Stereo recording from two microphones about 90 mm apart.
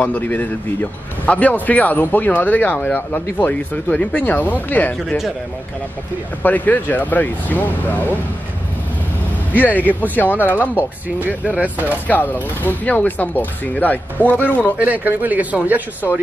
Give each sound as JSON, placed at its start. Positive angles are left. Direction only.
{"t": 0.0, "sound": "speech", "side_deg": 20}
{"t": 6.4, "sound": "speech", "side_deg": 20}
{"t": 9.5, "sound": "speech", "side_deg": 20}
{"t": 10.8, "sound": "speech", "side_deg": -20}
{"t": 12.1, "sound": "speech", "side_deg": 20}
{"t": 14.8, "sound": "speech", "side_deg": -20}